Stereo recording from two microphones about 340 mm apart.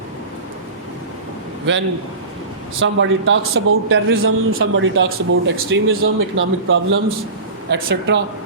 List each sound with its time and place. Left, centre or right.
2.8 s a man's voice: right